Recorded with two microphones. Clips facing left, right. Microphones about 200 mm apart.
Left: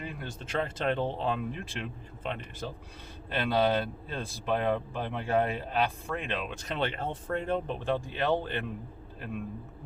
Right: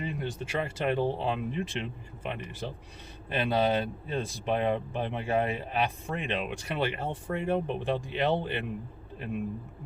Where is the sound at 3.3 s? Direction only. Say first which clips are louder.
Even; 20° right (ahead or behind).